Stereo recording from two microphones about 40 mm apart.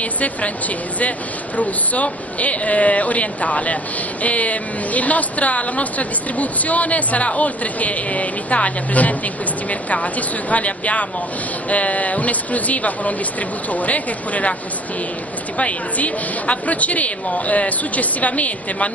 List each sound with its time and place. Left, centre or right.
0.0 s a woman's voice: left
1.6 s a woman's voice: left
15.5 s a woman's voice: left